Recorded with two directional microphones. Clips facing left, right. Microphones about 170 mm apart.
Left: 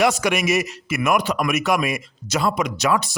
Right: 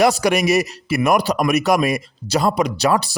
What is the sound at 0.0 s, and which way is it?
A man's voice, 35° right (ahead or behind).